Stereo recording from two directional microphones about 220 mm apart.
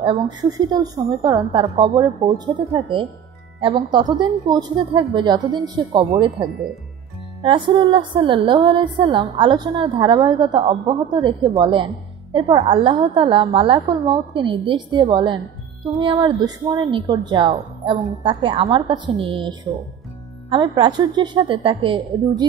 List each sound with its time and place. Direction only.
0.0 s a woman's voice: 20° right (ahead or behind)